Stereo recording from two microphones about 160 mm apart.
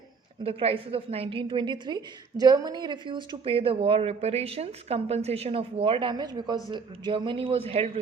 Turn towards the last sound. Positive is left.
turn(degrees=-35)  # may be behind; listen again after turning